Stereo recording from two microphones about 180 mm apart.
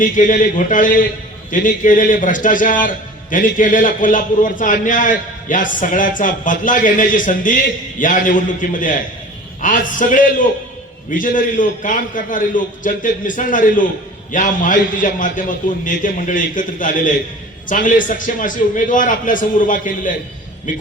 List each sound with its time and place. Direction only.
0.0 s a man's voice: 45° left (ahead or behind)